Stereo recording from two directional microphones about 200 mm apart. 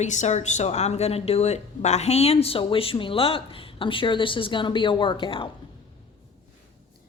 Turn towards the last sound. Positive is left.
turn(degrees=25)  # may be behind; listen again after turning